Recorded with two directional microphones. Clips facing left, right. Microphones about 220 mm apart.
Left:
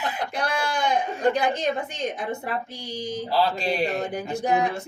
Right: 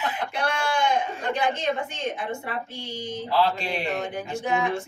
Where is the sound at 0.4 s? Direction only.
35° left (ahead or behind).